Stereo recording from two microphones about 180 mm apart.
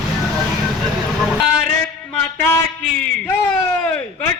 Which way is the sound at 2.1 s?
10° left (ahead or behind).